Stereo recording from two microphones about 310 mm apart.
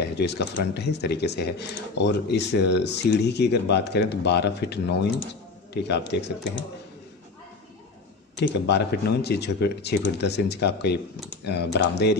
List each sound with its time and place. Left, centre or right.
0.1 s speech: left
8.4 s speech: left